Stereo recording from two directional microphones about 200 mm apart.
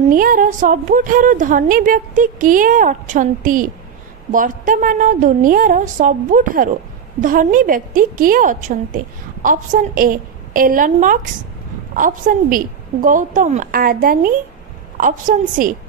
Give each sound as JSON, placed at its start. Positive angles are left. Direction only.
{"t": 0.0, "sound": "a woman's voice", "side_deg": -45}